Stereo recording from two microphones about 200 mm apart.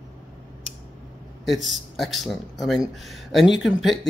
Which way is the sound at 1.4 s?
Centre (ahead or behind).